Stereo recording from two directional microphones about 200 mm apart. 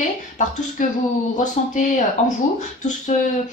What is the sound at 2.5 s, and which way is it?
Speech, 35° left (ahead or behind).